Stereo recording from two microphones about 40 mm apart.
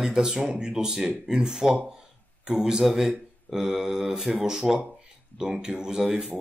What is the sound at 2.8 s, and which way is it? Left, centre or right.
Speech, centre.